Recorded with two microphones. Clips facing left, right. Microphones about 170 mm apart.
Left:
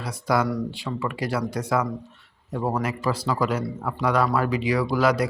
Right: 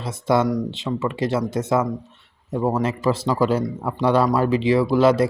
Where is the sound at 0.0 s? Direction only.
25° right (ahead or behind).